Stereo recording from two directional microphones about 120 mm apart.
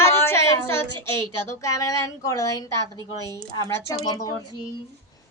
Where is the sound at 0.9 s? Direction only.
40° right (ahead or behind).